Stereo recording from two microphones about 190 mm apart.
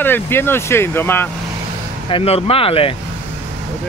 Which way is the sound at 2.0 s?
30° left (ahead or behind).